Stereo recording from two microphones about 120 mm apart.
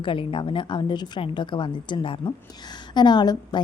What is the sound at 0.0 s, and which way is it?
A woman's voice, 45° left (ahead or behind).